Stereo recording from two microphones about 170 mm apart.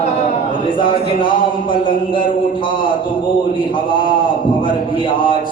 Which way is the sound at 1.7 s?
30° left (ahead or behind).